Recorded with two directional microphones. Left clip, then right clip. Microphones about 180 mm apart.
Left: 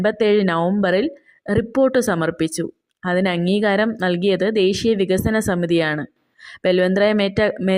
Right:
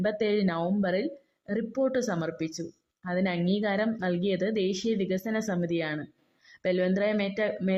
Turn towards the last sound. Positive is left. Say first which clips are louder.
# left 10 dB
turn(degrees=30)  # may be behind; listen again after turning